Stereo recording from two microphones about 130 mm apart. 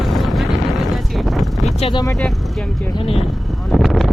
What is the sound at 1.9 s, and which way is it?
Speech, 30° left (ahead or behind).